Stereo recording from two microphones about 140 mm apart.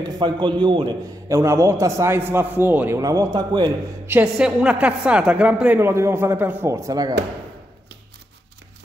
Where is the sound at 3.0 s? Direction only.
25° right (ahead or behind).